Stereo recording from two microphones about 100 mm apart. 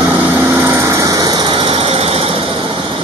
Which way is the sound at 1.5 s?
60° right (ahead or behind).